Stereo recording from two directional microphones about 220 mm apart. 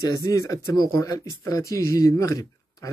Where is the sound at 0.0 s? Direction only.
15° left (ahead or behind).